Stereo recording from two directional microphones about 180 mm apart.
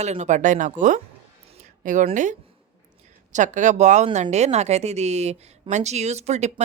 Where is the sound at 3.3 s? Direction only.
45° right (ahead or behind).